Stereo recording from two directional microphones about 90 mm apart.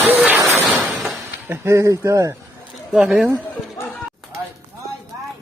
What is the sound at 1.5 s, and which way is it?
Speech, 30° right (ahead or behind).